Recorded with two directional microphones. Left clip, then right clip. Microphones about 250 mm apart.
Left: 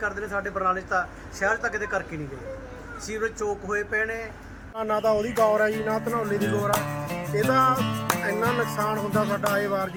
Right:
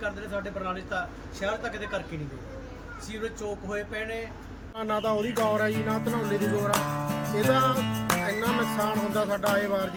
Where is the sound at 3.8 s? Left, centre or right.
Centre.